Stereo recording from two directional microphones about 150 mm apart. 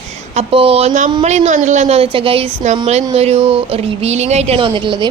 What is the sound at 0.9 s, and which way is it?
A woman's voice, 60° right (ahead or behind).